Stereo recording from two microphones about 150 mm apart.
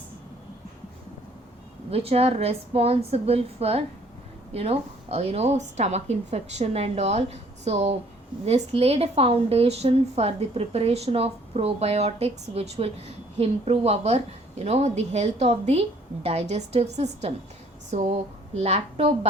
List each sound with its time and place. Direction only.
1.9 s a woman's voice: 40° right (ahead or behind)